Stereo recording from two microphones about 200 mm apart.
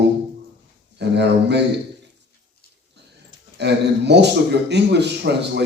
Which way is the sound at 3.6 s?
60° right (ahead or behind).